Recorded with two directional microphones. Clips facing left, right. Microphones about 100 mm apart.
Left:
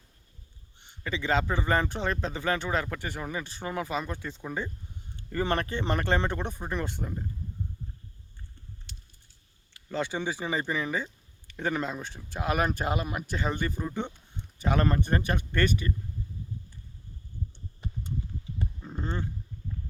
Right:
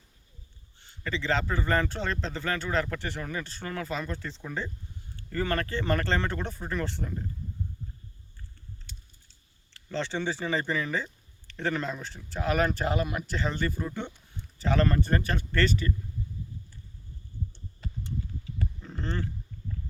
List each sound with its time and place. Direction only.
0.8 s speech: 15° left (ahead or behind)
9.7 s speech: 10° left (ahead or behind)
17.5 s a sound: 15° left (ahead or behind)